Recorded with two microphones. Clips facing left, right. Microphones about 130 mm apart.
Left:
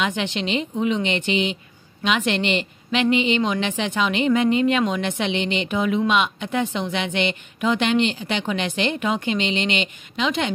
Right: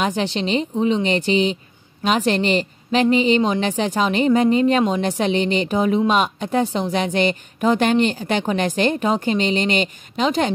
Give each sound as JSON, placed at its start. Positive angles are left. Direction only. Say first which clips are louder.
{"t": 0.0, "sound": "a woman's voice", "louder": "right 3 dB", "side_deg": -35}